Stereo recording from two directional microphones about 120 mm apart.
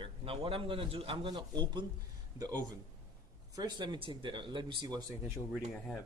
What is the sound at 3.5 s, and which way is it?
Speech, 35° right (ahead or behind).